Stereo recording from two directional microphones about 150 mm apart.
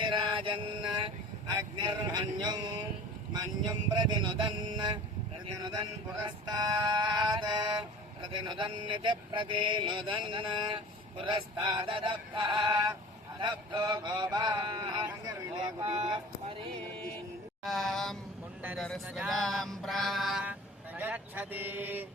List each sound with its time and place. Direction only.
0.0 s mantra: 35° right (ahead or behind)
1.5 s speech: 30° right (ahead or behind)
3.3 s male singing: 30° right (ahead or behind)
13.4 s speech: 30° right (ahead or behind)
15.8 s male singing: 40° right (ahead or behind)
17.6 s a sound: centre (ahead or behind)
19.0 s mantra: 5° right (ahead or behind)